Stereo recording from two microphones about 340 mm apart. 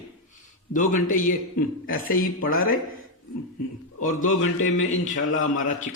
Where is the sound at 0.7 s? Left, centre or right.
Left.